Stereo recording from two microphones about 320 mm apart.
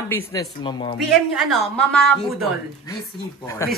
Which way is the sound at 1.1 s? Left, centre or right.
Centre.